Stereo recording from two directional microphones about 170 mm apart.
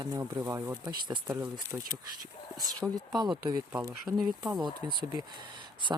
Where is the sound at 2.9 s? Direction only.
25° right (ahead or behind).